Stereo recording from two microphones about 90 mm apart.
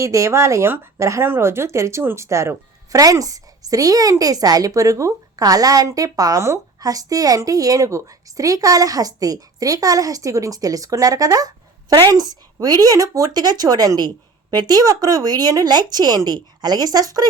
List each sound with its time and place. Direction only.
0.0 s speech: 35° right (ahead or behind)